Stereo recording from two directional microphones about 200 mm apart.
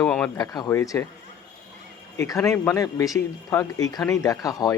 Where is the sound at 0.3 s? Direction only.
20° left (ahead or behind).